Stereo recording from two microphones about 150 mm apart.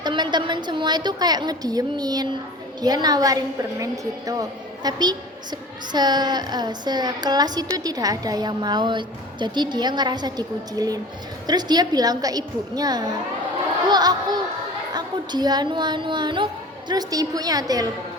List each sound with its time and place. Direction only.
0.0 s a woman's voice: 30° right (ahead or behind)